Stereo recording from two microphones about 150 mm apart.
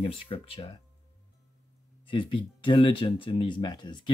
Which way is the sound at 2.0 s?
35° left (ahead or behind).